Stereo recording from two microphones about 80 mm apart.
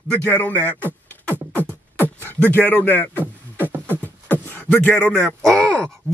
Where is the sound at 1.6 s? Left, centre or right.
Right.